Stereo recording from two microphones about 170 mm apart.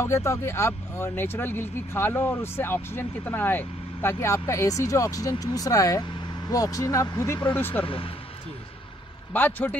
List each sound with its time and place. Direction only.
0.0 s speech: 15° left (ahead or behind)
7.5 s speech: 10° left (ahead or behind)
7.8 s speech: 30° left (ahead or behind)
9.3 s speech: 10° left (ahead or behind)